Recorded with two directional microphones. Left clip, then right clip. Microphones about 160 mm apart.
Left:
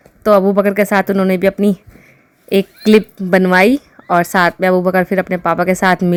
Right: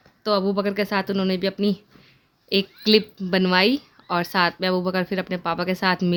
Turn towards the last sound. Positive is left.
turn(degrees=40)  # may be behind; listen again after turning